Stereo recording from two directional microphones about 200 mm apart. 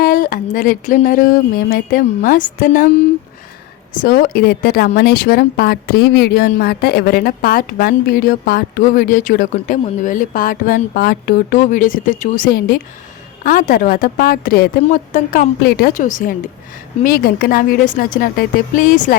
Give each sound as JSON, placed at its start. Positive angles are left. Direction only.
{"t": 0.0, "sound": "a woman's voice", "side_deg": 45}
{"t": 3.9, "sound": "a woman's voice", "side_deg": 45}